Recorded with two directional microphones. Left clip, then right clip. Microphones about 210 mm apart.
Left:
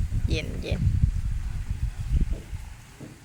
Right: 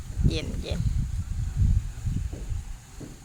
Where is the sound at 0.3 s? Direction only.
Centre (ahead or behind).